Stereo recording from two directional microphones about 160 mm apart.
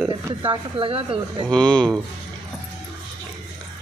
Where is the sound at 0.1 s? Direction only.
30° right (ahead or behind).